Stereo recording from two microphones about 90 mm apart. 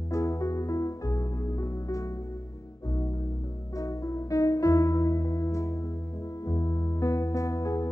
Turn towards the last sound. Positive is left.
turn(degrees=40)  # may be behind; listen again after turning